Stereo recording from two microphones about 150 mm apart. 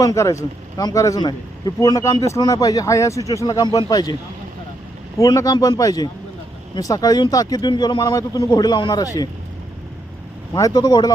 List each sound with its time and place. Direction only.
0.0 s speech: 20° left (ahead or behind)
5.1 s speech: 20° left (ahead or behind)
10.5 s speech: 25° left (ahead or behind)